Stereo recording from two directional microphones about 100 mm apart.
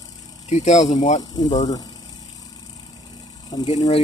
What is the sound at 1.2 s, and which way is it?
Speech, 40° left (ahead or behind).